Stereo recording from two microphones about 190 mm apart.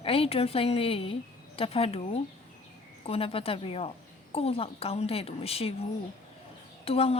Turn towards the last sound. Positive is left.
turn(degrees=30)  # may be behind; listen again after turning